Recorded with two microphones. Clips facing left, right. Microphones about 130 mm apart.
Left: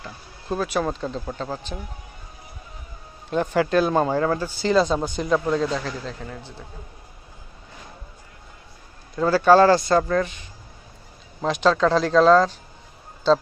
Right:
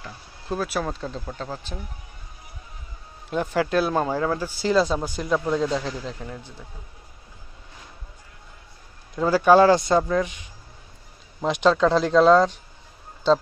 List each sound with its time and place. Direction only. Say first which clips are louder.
0.0 s speech: left 1 dB; centre (ahead or behind)
3.3 s speech: left 2 dB; 5° right (ahead or behind)
5.6 s speech: even; 15° right (ahead or behind)
9.1 s speech: left 1 dB; 10° right (ahead or behind)
11.6 s speech: even; 5° right (ahead or behind)